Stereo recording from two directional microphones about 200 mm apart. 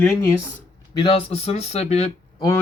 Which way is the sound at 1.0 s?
30° left (ahead or behind).